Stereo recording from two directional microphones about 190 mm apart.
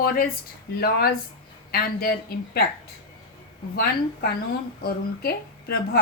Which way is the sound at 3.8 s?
55° left (ahead or behind).